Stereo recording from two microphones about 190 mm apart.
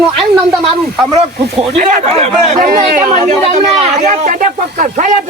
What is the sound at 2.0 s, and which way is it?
Speech, 30° right (ahead or behind).